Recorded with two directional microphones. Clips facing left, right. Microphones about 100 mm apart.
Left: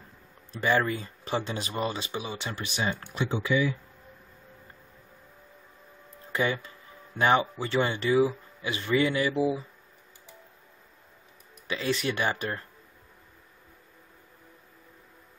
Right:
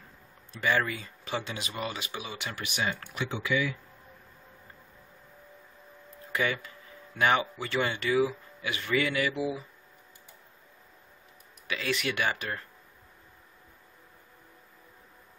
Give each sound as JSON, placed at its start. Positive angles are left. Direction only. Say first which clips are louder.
{"t": 0.5, "sound": "speech", "louder": "left 3 dB", "side_deg": 35}
{"t": 6.3, "sound": "speech", "louder": "left 2 dB", "side_deg": 25}
{"t": 11.6, "sound": "speech", "louder": "left 3 dB", "side_deg": 30}